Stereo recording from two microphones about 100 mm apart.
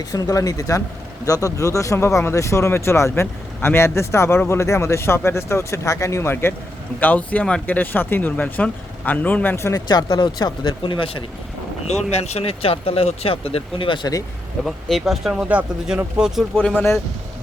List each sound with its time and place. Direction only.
0.1 s speech: 35° left (ahead or behind)
9.9 s speech: 45° left (ahead or behind)
11.9 s speech: 90° left; by 14.1 s 55° left (ahead or behind)
14.6 s speech: centre (ahead or behind)
15.4 s speech: 15° right (ahead or behind)
16.6 s speech: 10° left (ahead or behind)